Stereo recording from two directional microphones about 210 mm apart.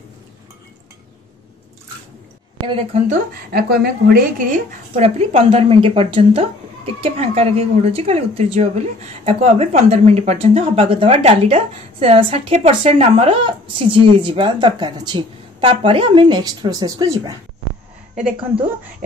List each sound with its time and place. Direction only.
2.7 s speech: 30° right (ahead or behind)
3.5 s speech: 45° right (ahead or behind); by 17.2 s 15° right (ahead or behind)